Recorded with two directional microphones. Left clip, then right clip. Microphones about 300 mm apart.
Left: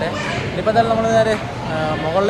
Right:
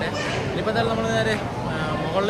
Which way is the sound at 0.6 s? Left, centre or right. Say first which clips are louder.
Left 9 dB; centre.